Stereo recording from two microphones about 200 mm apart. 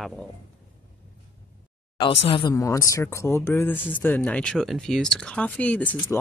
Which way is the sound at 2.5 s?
15° left (ahead or behind).